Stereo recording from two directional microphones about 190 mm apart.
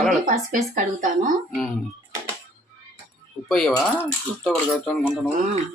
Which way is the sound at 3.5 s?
Centre (ahead or behind).